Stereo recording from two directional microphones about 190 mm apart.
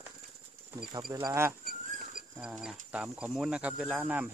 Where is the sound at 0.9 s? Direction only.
20° right (ahead or behind).